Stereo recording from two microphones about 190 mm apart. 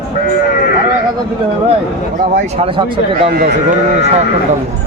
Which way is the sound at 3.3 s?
45° right (ahead or behind).